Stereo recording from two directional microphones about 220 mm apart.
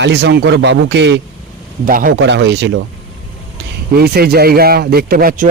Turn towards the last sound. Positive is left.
turn(degrees=-40)  # may be behind; listen again after turning